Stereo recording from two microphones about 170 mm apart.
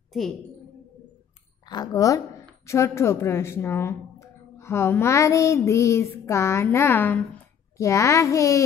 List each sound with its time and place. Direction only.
1.7 s a woman's voice: 20° left (ahead or behind)